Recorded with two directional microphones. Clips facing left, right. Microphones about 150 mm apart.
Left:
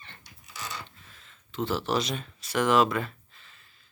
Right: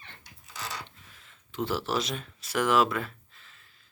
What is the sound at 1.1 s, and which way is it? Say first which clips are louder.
Speech: left 1 dB; 10° right (ahead or behind).